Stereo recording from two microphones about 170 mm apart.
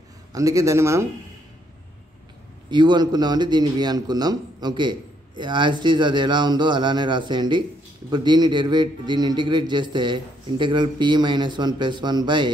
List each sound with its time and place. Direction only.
0.3 s a man's voice: 20° right (ahead or behind)
2.7 s a man's voice: 25° right (ahead or behind)